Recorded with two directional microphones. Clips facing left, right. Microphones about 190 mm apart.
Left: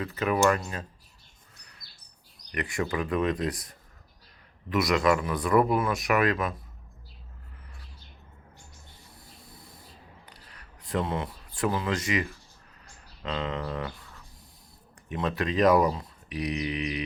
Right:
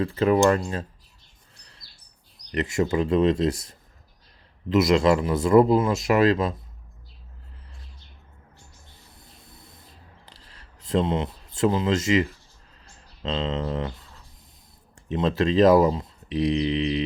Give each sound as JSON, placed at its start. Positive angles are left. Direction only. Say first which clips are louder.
{"t": 0.0, "sound": "speech", "louder": "right 5 dB", "side_deg": -30}
{"t": 2.5, "sound": "speech", "louder": "right 6 dB", "side_deg": -25}
{"t": 9.1, "sound": "a sound", "louder": "left 1 dB", "side_deg": -20}
{"t": 13.2, "sound": "speech", "louder": "right 5 dB", "side_deg": -25}